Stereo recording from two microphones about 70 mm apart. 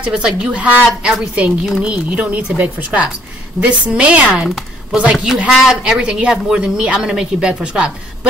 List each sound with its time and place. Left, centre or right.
0.0 s speech: centre
0.8 s a woman's voice: centre
1.3 s speech: centre